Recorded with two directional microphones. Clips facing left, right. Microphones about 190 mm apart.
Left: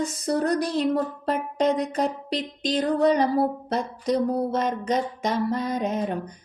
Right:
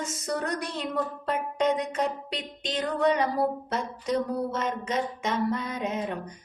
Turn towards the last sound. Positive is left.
turn(degrees=40)  # may be behind; listen again after turning